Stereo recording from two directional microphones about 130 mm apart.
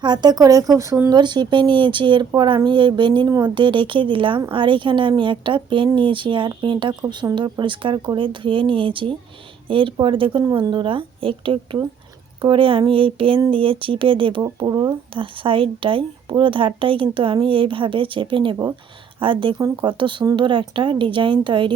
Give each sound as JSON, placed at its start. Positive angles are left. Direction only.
{"t": 0.0, "sound": "speech", "side_deg": -35}
{"t": 1.1, "sound": "a woman's voice", "side_deg": -35}
{"t": 19.5, "sound": "a woman's voice", "side_deg": -25}